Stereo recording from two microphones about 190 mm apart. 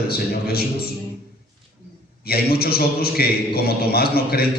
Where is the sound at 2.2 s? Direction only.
55° left (ahead or behind).